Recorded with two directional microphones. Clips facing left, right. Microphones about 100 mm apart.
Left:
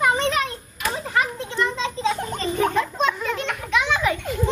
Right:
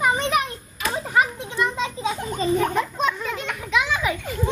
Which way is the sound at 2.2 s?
5° right (ahead or behind).